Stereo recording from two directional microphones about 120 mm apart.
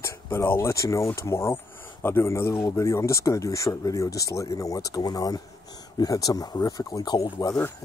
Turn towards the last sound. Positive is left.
turn(degrees=35)  # may be behind; listen again after turning